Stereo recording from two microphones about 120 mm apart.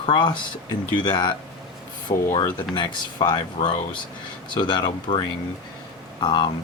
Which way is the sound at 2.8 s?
40° left (ahead or behind).